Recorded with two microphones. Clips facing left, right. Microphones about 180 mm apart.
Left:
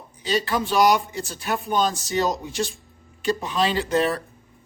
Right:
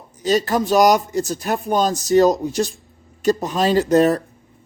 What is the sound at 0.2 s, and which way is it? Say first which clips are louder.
Chopping: right 6 dB; 45° right (ahead or behind).